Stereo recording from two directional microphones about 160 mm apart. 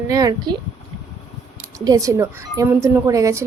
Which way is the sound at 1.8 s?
20° right (ahead or behind).